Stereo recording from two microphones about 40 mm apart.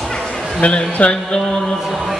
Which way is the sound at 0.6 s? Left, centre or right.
Left.